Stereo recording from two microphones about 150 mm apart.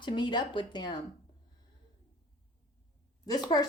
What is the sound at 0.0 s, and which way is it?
Speech, 30° left (ahead or behind).